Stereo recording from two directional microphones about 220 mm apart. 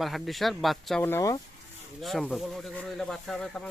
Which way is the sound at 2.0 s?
Centre (ahead or behind).